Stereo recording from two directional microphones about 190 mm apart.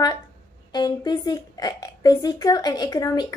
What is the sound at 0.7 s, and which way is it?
A woman's voice, 20° left (ahead or behind).